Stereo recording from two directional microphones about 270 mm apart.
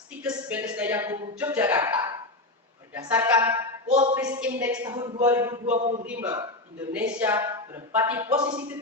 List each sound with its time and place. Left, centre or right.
0.2 s speech: centre
3.8 s a man's voice: centre
5.7 s a man's voice: right
6.1 s speech: centre